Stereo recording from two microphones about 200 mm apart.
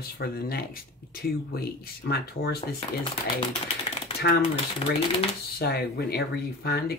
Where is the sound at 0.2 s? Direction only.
50° left (ahead or behind).